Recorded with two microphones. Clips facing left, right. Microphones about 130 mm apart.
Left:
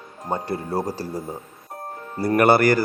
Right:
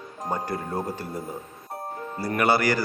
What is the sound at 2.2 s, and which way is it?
Speech, 50° left (ahead or behind).